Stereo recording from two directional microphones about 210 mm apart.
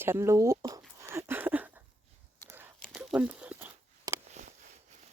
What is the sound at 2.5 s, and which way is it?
Whispering, 10° right (ahead or behind).